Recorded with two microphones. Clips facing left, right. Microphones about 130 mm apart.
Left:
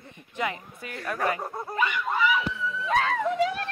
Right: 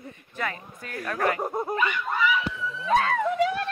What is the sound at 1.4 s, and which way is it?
Speech, 15° right (ahead or behind).